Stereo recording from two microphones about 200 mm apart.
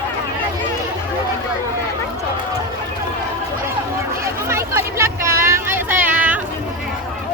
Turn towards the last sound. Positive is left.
turn(degrees=-10)  # may be behind; listen again after turning